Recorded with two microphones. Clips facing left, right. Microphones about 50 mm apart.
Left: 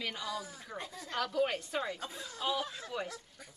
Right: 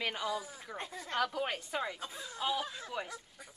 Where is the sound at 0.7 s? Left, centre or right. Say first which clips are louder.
Right 1 dB; right.